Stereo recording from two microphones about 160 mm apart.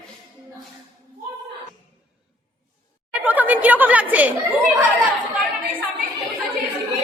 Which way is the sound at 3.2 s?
10° right (ahead or behind).